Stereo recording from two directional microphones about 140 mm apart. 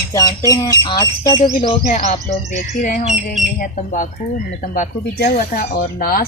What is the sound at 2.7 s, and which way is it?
Speech, 65° left (ahead or behind).